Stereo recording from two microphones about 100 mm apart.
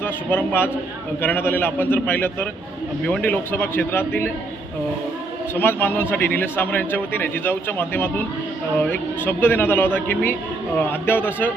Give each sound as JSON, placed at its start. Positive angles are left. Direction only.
{"t": 0.0, "sound": "a man's voice", "side_deg": 20}
{"t": 5.5, "sound": "a man's voice", "side_deg": 20}